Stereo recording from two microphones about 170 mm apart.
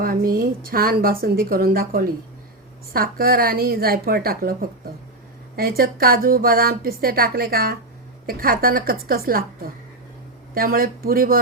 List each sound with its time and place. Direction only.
0.0 s speech: 60° right (ahead or behind)
5.5 s speech: 60° right (ahead or behind)